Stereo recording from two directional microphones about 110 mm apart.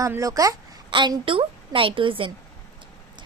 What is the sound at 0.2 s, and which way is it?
Speech, 30° right (ahead or behind).